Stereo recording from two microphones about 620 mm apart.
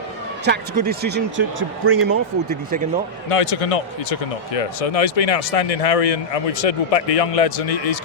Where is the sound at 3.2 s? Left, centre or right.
Left.